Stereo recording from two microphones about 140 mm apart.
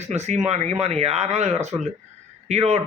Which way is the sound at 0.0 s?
55° right (ahead or behind).